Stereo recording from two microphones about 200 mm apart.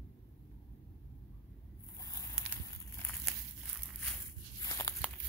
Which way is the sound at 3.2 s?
5° left (ahead or behind).